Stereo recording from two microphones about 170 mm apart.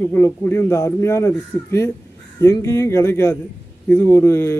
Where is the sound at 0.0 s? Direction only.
10° left (ahead or behind).